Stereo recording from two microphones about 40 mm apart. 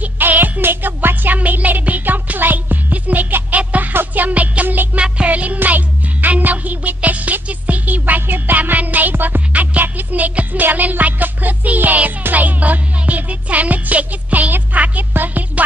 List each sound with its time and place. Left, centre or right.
0.2 s music: right
5.0 s music: right
5.3 s music: right
9.1 s music: right
9.5 s music: right